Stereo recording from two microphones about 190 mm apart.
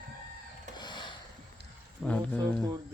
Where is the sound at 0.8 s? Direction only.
25° left (ahead or behind).